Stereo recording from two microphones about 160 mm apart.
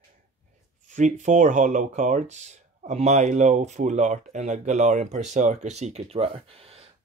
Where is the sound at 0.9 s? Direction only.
50° right (ahead or behind).